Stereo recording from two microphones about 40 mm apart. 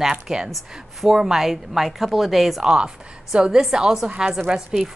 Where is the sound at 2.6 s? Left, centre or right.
Centre.